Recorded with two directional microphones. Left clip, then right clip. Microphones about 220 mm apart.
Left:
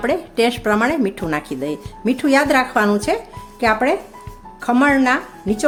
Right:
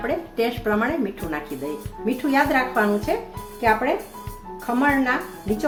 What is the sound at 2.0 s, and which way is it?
Speech, 55° left (ahead or behind).